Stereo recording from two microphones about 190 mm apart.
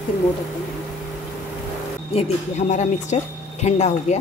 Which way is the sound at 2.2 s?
35° left (ahead or behind).